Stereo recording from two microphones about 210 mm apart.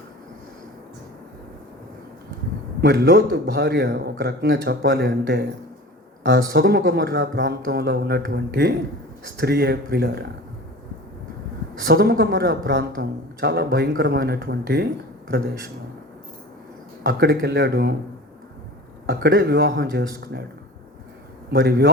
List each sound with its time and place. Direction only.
2.8 s a man's voice: 45° right (ahead or behind)
11.9 s a man's voice: 45° right (ahead or behind)
17.0 s a man's voice: 50° right (ahead or behind)
19.0 s a man's voice: 55° right (ahead or behind)
21.5 s a man's voice: 50° right (ahead or behind)